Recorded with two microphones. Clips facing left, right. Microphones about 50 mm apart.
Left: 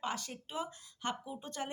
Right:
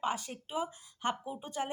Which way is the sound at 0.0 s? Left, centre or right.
Right.